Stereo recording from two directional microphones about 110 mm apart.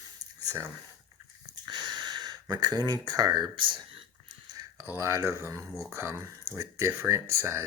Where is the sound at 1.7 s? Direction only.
40° right (ahead or behind).